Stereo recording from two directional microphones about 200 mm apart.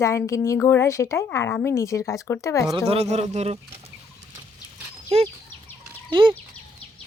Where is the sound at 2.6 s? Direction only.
25° right (ahead or behind).